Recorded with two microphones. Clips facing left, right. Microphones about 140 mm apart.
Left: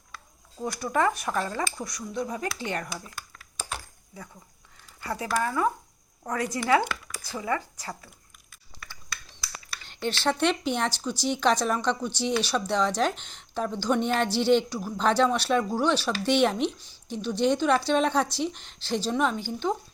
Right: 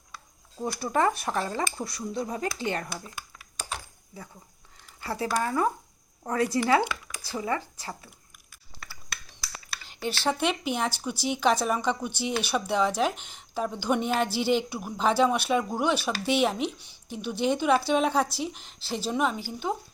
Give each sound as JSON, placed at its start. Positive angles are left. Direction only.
{"t": 0.8, "sound": "speech", "side_deg": -30}
{"t": 5.0, "sound": "speech", "side_deg": -30}
{"t": 9.8, "sound": "a sound", "side_deg": -5}
{"t": 10.2, "sound": "a woman's voice", "side_deg": -5}